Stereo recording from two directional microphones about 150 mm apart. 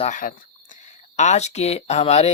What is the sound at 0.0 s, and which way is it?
Speech, 60° left (ahead or behind).